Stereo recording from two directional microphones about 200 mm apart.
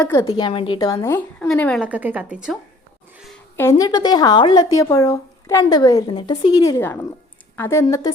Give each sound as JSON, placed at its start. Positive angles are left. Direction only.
{"t": 0.0, "sound": "speech", "side_deg": 15}
{"t": 0.3, "sound": "a woman's voice", "side_deg": 25}
{"t": 1.8, "sound": "a woman's voice", "side_deg": -5}
{"t": 3.6, "sound": "speech", "side_deg": 15}